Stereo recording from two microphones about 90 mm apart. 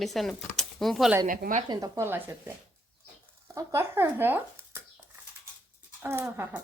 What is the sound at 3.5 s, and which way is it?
Speech, 30° right (ahead or behind).